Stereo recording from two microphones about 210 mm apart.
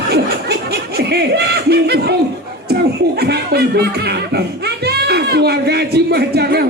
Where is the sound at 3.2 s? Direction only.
50° right (ahead or behind).